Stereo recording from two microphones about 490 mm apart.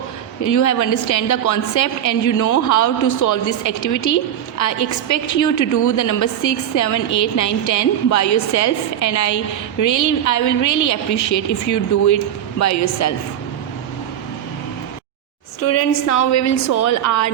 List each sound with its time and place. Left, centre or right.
0.4 s a woman's voice: left
15.6 s a woman's voice: left